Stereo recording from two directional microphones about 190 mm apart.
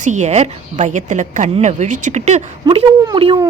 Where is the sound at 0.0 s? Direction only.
40° right (ahead or behind).